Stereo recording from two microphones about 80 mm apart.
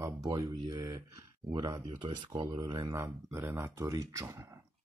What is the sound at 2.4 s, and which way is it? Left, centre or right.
Speech, right.